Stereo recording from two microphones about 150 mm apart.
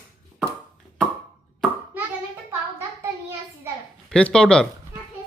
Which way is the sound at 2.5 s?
15° right (ahead or behind).